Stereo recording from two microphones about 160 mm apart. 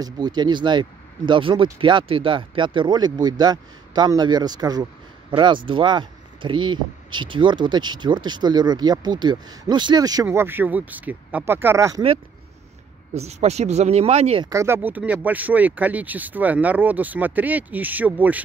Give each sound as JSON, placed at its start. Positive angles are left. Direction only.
{"t": 0.0, "sound": "speech", "side_deg": -25}
{"t": 10.2, "sound": "speech", "side_deg": -15}
{"t": 13.1, "sound": "speech", "side_deg": -45}
{"t": 14.4, "sound": "speech", "side_deg": -20}